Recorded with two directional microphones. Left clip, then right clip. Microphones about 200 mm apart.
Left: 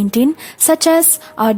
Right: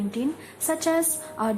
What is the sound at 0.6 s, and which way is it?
Speech, 45° left (ahead or behind).